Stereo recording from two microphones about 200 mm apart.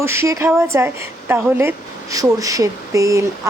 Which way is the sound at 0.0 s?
15° right (ahead or behind).